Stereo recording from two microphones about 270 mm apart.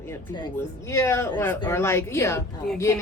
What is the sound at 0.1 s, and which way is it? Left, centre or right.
Speech, centre.